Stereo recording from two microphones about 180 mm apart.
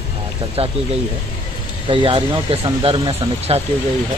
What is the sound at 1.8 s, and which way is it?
Speech, 30° right (ahead or behind).